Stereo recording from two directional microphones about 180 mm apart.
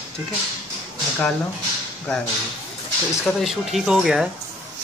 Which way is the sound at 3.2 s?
Centre (ahead or behind).